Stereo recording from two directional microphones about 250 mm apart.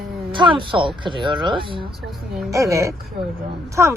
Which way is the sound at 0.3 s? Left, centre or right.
Centre.